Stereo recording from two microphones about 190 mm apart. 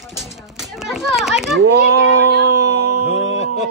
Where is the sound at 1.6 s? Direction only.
65° right (ahead or behind).